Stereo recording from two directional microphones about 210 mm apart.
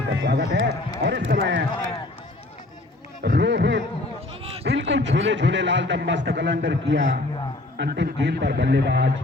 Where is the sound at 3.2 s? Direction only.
50° right (ahead or behind).